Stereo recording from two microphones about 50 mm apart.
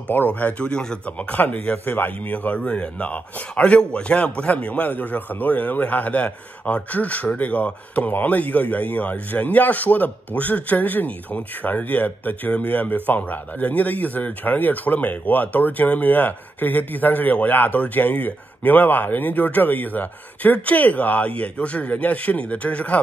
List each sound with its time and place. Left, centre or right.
0.1 s speech: left; by 1.1 s centre
1.3 s a man's voice: left